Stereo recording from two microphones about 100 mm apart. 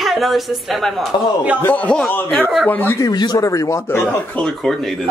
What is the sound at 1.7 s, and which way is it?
A man's voice, 15° left (ahead or behind).